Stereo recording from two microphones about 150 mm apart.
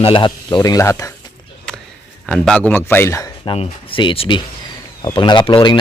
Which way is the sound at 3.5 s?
35° left (ahead or behind).